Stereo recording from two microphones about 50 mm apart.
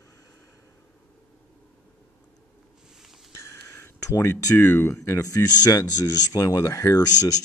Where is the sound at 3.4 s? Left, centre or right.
Left.